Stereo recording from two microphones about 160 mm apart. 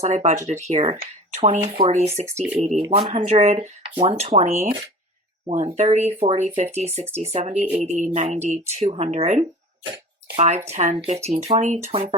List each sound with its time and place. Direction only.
0.0 s speech: 45° right (ahead or behind)
2.2 s speech: 15° right (ahead or behind)
3.1 s speech: 35° right (ahead or behind)
3.4 s speech: 45° right (ahead or behind)
3.9 s speech: 35° right (ahead or behind)